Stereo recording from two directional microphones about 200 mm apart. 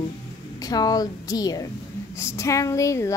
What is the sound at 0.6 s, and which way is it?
Speech, 20° left (ahead or behind).